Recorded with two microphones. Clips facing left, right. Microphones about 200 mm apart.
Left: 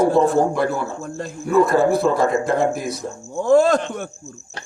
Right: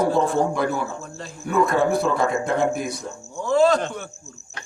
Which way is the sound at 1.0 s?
50° left (ahead or behind).